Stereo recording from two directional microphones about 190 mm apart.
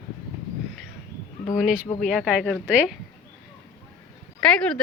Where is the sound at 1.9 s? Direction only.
Centre (ahead or behind).